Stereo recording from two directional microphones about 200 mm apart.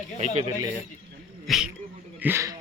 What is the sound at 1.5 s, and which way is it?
Speech, 5° right (ahead or behind).